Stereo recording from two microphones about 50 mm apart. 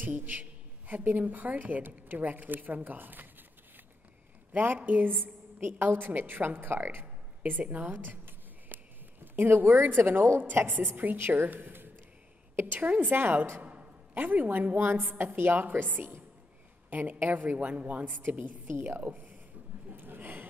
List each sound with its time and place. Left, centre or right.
0.0 s a woman's voice: right
4.5 s a woman's voice: right
7.6 s a sound: right
10.6 s a woman's voice: right
13.6 s a sound: right
14.1 s a woman's voice: right
16.9 s a woman's voice: right
19.0 s speech: right
19.9 s a sound: right